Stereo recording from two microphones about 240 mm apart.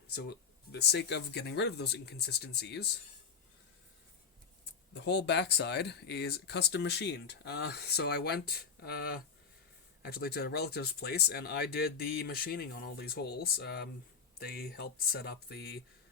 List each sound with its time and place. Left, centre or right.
0.1 s speech: left
4.9 s speech: left